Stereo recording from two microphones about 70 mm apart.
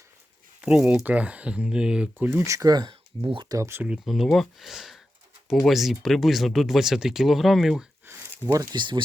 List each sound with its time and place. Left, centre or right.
0.6 s speech: centre
1.0 s speech: right
2.1 s speech: right
2.4 s speech: right
3.5 s speech: right
4.0 s speech: centre
8.0 s a sound: right
8.7 s speech: right